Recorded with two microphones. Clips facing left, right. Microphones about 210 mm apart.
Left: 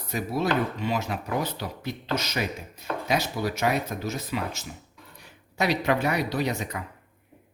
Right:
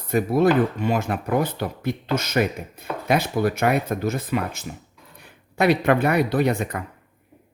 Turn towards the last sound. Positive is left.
turn(degrees=-55)  # may be behind; listen again after turning